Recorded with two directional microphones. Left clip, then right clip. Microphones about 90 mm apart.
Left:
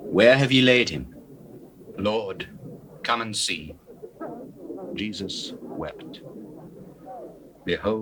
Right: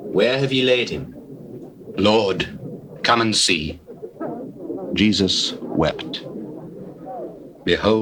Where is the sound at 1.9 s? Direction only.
30° right (ahead or behind).